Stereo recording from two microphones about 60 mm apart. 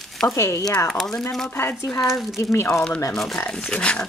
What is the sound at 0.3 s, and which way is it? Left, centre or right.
Speech, left.